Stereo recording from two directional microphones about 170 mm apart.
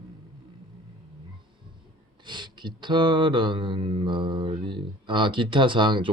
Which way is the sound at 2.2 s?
25° right (ahead or behind).